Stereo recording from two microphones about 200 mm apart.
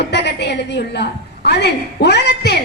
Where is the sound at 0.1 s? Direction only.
55° left (ahead or behind).